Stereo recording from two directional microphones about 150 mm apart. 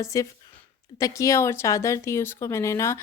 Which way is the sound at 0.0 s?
20° left (ahead or behind).